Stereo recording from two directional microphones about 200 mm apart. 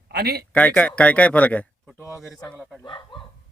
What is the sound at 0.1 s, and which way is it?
Speech, 55° right (ahead or behind).